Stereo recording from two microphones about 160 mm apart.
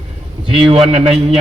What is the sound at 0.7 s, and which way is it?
Speech, 40° right (ahead or behind).